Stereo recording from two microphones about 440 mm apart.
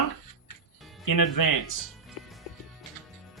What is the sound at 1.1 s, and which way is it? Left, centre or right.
Speech, left.